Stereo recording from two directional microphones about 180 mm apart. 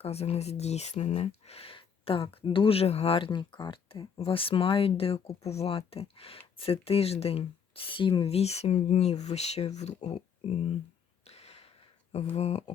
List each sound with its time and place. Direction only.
0.0 s speech: 35° left (ahead or behind)
11.3 s a sound: 35° left (ahead or behind)
12.1 s speech: 35° left (ahead or behind)